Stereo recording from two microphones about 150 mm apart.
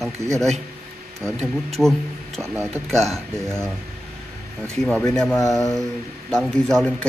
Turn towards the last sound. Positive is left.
turn(degrees=5)  # may be behind; listen again after turning